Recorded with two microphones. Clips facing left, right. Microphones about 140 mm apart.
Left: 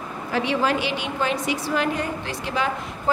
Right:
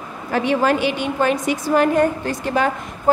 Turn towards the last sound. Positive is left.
turn(degrees=-50)  # may be behind; listen again after turning